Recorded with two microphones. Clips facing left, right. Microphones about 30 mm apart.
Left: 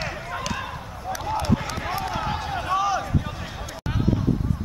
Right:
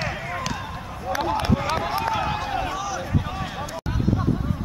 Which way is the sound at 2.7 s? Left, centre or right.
Left.